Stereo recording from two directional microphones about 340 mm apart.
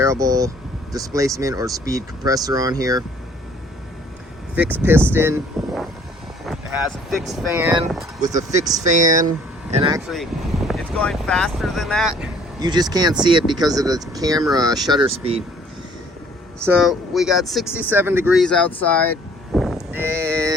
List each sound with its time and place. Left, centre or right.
0.0 s speech: centre
4.5 s speech: centre
8.8 s speech: right
10.1 s speech: centre
12.5 s speech: centre
16.6 s speech: centre